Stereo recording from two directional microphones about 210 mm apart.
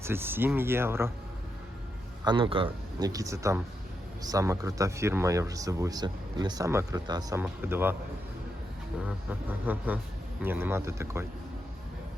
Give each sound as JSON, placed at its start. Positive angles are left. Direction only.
{"t": 0.0, "sound": "speech", "side_deg": -10}
{"t": 2.2, "sound": "speech", "side_deg": -25}
{"t": 9.6, "sound": "speech", "side_deg": -10}